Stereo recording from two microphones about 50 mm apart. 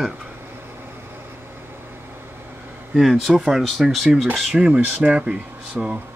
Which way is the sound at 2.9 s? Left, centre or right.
Centre.